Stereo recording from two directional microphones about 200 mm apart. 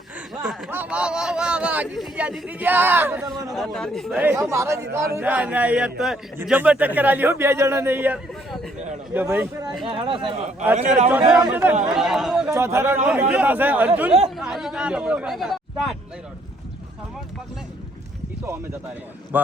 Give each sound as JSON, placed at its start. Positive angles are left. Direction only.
{"t": 0.4, "sound": "a man's voice", "side_deg": -5}
{"t": 9.8, "sound": "speech", "side_deg": -25}
{"t": 11.3, "sound": "a man's voice", "side_deg": -5}
{"t": 12.5, "sound": "a man's voice", "side_deg": -15}
{"t": 19.3, "sound": "a man's voice", "side_deg": -10}